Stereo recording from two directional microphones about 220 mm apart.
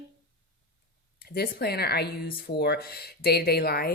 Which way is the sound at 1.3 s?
45° left (ahead or behind).